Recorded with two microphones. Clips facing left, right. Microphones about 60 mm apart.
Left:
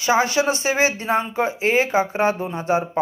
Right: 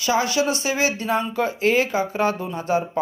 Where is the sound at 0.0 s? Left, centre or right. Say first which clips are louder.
Left 2 dB; left.